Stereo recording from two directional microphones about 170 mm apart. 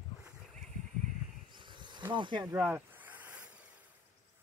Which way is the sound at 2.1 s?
30° right (ahead or behind).